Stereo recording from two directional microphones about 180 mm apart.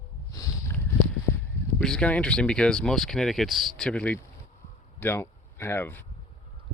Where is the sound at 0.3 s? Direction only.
20° left (ahead or behind).